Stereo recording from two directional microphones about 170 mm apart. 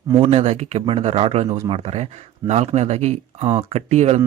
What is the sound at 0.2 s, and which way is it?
A man's voice, 40° right (ahead or behind).